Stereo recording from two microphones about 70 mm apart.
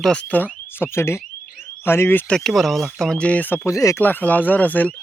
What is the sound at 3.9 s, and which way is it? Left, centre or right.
Speech, left.